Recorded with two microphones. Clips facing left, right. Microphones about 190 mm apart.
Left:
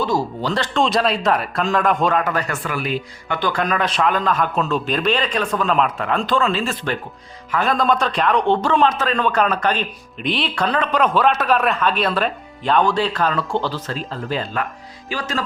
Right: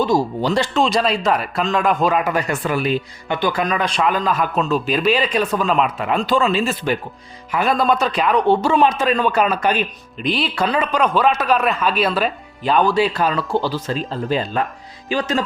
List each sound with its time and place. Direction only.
0.0 s speech: 15° right (ahead or behind)
2.6 s speech: 25° right (ahead or behind)
3.4 s a man's voice: 5° right (ahead or behind); by 15.4 s 20° right (ahead or behind)